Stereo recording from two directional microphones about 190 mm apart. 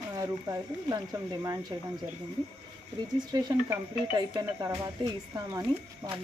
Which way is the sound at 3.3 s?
20° right (ahead or behind).